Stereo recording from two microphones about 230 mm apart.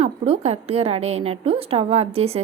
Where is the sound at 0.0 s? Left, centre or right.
Right.